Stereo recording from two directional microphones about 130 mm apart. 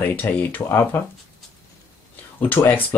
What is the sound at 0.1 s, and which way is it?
Speech, 15° left (ahead or behind).